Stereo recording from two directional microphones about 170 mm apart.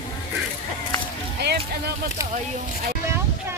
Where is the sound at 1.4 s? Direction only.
80° right.